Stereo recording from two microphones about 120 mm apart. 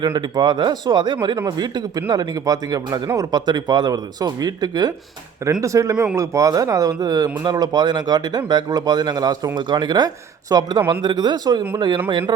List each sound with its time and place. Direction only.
0.0 s speech: 35° right (ahead or behind)